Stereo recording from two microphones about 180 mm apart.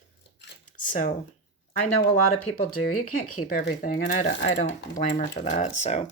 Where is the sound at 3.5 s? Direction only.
55° left (ahead or behind).